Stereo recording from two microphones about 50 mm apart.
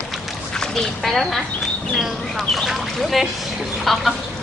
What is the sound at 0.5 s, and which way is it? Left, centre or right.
Speech, centre.